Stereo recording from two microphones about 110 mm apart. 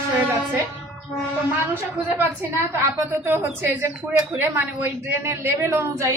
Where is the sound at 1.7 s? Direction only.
20° right (ahead or behind).